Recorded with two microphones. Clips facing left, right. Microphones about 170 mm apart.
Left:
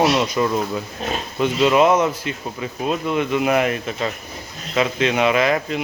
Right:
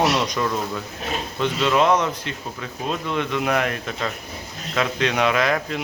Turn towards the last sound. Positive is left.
turn(degrees=5)  # may be behind; listen again after turning